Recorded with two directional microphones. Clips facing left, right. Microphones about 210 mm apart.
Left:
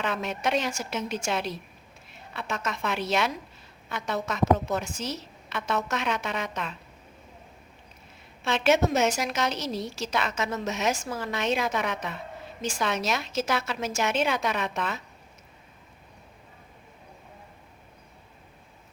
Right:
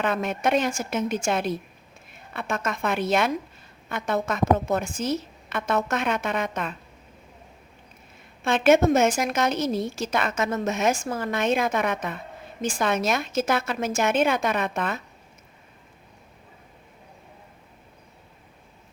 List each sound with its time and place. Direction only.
0.0 s a woman's voice: 50° right (ahead or behind)
8.4 s a woman's voice: 50° right (ahead or behind)